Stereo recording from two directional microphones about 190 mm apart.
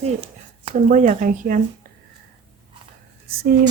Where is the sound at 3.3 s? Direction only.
50° right (ahead or behind).